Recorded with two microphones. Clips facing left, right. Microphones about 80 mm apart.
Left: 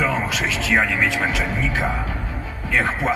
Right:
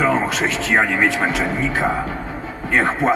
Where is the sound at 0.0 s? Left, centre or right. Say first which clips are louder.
Right 4 dB; right.